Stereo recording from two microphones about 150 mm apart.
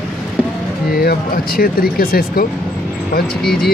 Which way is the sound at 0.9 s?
90° left.